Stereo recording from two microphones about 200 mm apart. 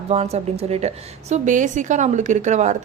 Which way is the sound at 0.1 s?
30° right (ahead or behind).